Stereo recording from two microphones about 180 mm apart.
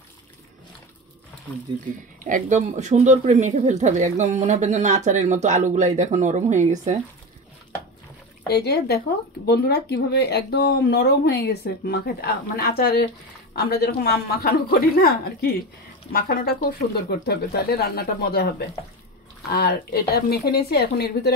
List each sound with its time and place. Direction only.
2.2 s speech: 45° right (ahead or behind)
8.5 s speech: 65° left (ahead or behind)
19.5 s speech: 60° left (ahead or behind)